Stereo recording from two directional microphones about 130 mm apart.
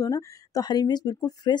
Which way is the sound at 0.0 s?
25° left (ahead or behind).